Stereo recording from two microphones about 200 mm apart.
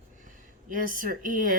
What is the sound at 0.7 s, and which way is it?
Speech, 45° right (ahead or behind).